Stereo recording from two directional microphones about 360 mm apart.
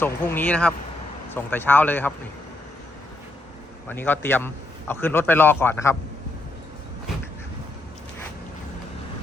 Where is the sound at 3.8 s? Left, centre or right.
Centre.